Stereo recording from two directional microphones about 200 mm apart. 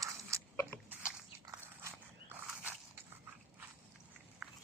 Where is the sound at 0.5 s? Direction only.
10° left (ahead or behind).